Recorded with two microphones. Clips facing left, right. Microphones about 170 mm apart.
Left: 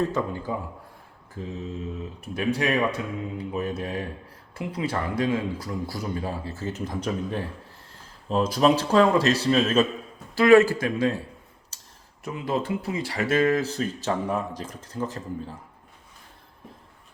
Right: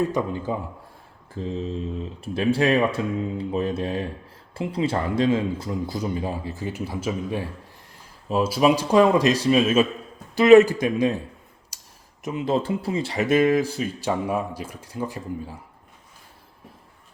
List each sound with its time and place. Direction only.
0.1 s speech: 15° right (ahead or behind)
1.4 s speech: 30° right (ahead or behind)
11.7 s a sound: 10° right (ahead or behind)
12.2 s speech: 20° right (ahead or behind)